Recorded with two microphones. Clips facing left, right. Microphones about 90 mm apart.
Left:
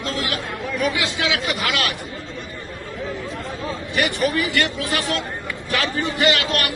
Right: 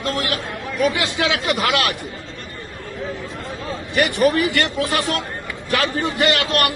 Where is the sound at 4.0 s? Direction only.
50° right (ahead or behind).